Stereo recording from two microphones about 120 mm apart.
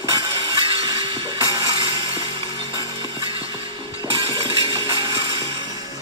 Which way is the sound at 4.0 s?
45° right (ahead or behind).